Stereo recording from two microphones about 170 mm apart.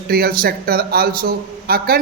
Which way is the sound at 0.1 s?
65° right (ahead or behind).